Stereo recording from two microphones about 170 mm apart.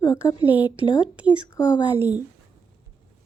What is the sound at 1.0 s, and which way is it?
Speech, 5° right (ahead or behind).